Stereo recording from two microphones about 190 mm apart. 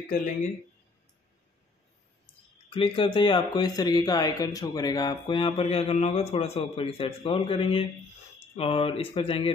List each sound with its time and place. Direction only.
2.7 s speech: 30° left (ahead or behind)